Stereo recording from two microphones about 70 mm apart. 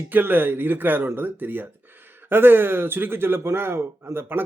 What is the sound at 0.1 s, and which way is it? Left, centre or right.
A man's voice, right.